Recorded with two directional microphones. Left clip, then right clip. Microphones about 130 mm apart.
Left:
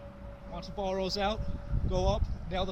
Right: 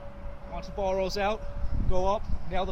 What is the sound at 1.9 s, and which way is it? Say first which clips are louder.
Speech: right 4 dB; 35° left (ahead or behind).